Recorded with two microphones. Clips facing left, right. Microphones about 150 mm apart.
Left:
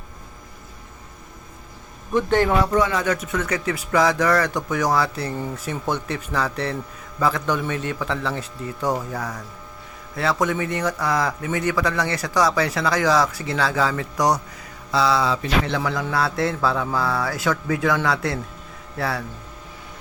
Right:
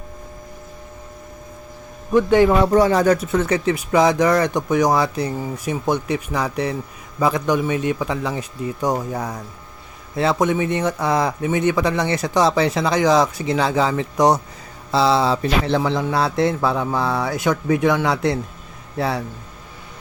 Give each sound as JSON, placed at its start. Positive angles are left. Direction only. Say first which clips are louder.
{"t": 2.3, "sound": "a man's voice", "louder": "right 5 dB", "side_deg": -10}
{"t": 2.7, "sound": "speech", "louder": "right 6 dB", "side_deg": -35}
{"t": 5.3, "sound": "a man's voice", "louder": "right 3 dB", "side_deg": -10}